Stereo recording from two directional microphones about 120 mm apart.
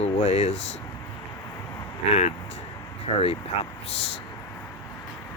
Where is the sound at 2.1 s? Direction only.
65° left (ahead or behind).